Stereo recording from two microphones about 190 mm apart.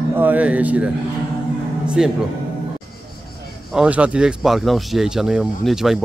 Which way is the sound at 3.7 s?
5° right (ahead or behind).